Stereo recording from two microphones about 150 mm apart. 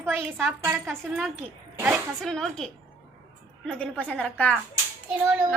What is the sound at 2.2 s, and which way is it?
A woman's voice, 5° left (ahead or behind).